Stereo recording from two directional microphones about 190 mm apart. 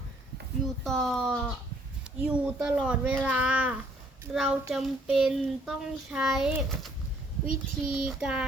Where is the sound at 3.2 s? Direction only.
5° right (ahead or behind).